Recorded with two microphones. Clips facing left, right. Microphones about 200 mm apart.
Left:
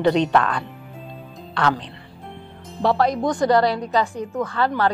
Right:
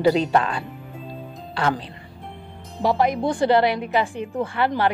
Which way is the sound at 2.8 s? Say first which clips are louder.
Left 1 dB; 20° right (ahead or behind).